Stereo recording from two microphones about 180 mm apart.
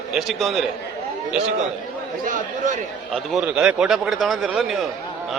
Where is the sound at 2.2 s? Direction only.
45° right (ahead or behind).